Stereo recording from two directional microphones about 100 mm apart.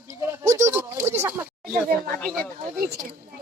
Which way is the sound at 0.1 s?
30° right (ahead or behind).